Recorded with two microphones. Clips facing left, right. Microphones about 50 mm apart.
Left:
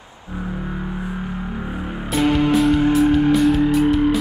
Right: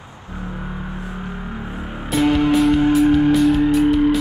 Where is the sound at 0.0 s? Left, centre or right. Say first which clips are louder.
Right 3 dB; right.